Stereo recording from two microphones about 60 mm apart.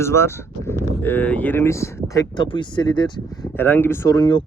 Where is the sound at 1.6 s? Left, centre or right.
Left.